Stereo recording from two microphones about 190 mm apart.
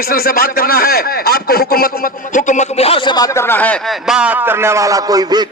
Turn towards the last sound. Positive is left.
turn(degrees=-20)  # may be behind; listen again after turning